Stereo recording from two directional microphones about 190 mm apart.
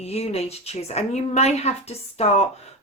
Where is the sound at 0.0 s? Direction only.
35° left (ahead or behind).